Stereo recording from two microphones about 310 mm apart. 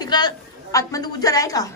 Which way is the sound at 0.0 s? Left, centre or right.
Centre.